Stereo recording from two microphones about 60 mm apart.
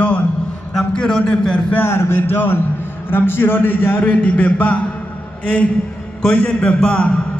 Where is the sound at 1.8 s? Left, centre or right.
Left.